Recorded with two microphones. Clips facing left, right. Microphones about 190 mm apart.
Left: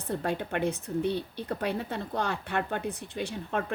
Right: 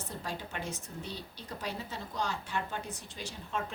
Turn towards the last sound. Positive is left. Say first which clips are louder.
# left 7 dB
turn(degrees=60)  # may be behind; listen again after turning